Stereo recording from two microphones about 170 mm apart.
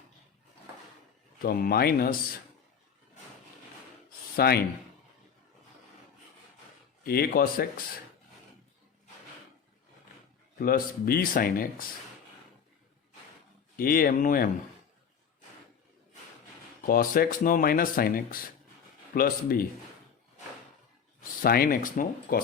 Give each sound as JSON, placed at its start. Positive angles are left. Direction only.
{"t": 1.4, "sound": "speech", "side_deg": 60}
{"t": 4.4, "sound": "speech", "side_deg": 70}
{"t": 7.0, "sound": "speech", "side_deg": 60}
{"t": 10.6, "sound": "speech", "side_deg": 60}
{"t": 13.7, "sound": "speech", "side_deg": 60}
{"t": 16.8, "sound": "speech", "side_deg": 55}
{"t": 21.4, "sound": "speech", "side_deg": 60}